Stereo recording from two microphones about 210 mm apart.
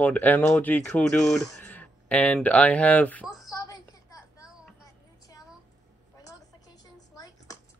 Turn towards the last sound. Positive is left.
turn(degrees=20)  # may be behind; listen again after turning